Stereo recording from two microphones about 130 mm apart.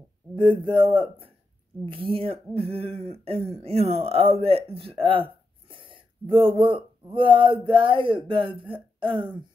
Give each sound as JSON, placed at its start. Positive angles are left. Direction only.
{"t": 0.4, "sound": "speech", "side_deg": -40}